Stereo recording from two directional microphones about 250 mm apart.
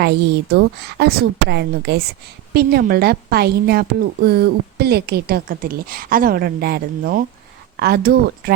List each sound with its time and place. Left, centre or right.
0.0 s a woman's voice: right